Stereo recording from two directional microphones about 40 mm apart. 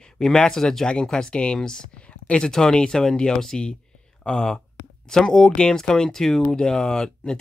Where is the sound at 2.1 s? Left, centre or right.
Left.